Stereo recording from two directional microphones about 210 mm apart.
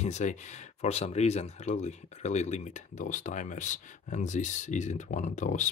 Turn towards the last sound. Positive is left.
turn(degrees=35)  # may be behind; listen again after turning